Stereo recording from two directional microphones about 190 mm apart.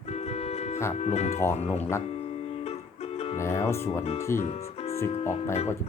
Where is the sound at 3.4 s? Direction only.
15° left (ahead or behind).